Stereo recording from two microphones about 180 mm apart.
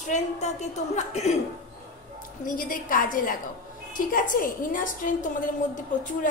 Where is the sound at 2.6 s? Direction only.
50° left (ahead or behind).